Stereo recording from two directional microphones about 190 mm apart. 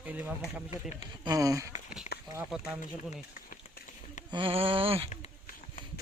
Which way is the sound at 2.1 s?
55° left (ahead or behind).